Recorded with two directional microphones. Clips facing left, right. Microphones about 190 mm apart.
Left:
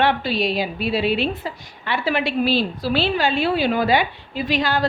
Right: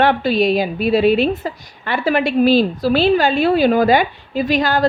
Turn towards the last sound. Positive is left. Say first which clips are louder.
# right 5 dB
turn(degrees=-45)  # may be behind; listen again after turning